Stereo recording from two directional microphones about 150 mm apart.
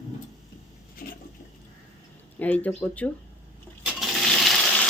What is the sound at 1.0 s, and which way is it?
Toilet flush, 75° left (ahead or behind).